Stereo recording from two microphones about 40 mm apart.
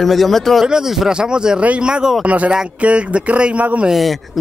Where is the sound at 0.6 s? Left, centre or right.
Centre.